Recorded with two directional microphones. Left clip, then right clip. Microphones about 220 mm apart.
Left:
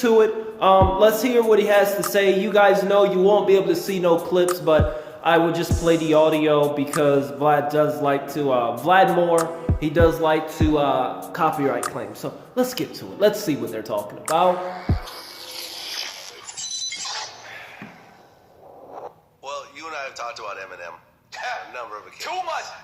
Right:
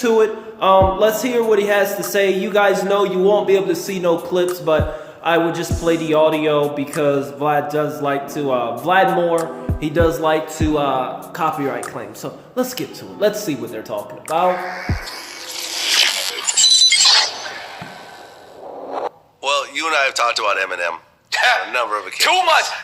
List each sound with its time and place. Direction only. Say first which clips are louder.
0.0 s a man's voice: right 1 dB; centre (ahead or behind)
14.5 s speech: right 3 dB; 30° right (ahead or behind)
15.5 s a sound: right 15 dB; 35° right (ahead or behind)
18.9 s zipper: right 12 dB; 40° right (ahead or behind)
21.3 s speech: right 14 dB; 40° right (ahead or behind)